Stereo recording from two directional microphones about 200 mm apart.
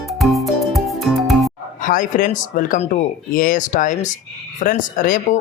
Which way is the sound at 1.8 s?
40° left (ahead or behind).